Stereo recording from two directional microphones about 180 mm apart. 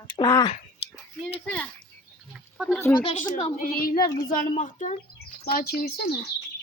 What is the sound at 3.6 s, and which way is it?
Speech, 55° left (ahead or behind).